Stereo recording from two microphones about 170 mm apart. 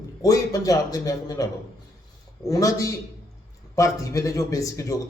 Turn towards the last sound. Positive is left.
turn(degrees=20)  # may be behind; listen again after turning